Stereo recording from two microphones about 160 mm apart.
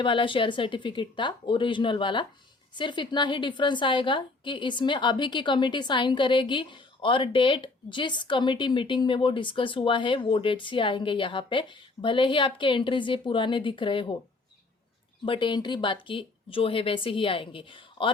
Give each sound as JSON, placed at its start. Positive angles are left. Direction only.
{"t": 0.0, "sound": "a woman's voice", "side_deg": 30}
{"t": 15.2, "sound": "a woman's voice", "side_deg": 30}